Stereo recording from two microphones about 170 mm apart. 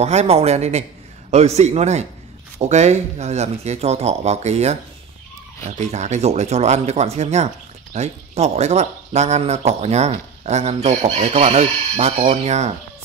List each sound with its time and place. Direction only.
0.0 s speech: 40° right (ahead or behind)